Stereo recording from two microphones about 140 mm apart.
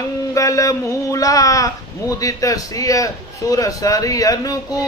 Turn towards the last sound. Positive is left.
turn(degrees=25)  # may be behind; listen again after turning